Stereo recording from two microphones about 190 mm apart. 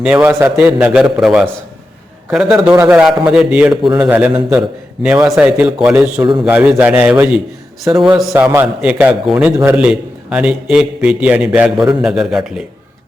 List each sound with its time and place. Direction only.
0.0 s a man's voice: 10° right (ahead or behind)
6.1 s a man's voice: 25° right (ahead or behind)
6.4 s a man's voice: 10° right (ahead or behind)
7.9 s a man's voice: 15° right (ahead or behind)